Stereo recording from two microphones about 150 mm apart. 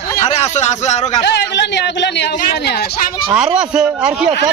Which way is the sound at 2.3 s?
90° left.